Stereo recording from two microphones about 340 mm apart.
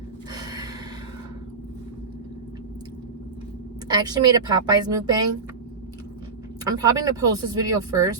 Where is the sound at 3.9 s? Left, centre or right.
Centre.